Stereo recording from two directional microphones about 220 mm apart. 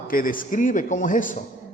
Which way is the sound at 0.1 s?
40° left (ahead or behind).